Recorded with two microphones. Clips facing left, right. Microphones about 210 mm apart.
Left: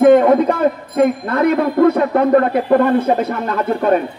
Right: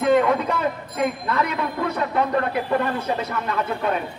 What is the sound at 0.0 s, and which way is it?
A man's voice, 50° left (ahead or behind).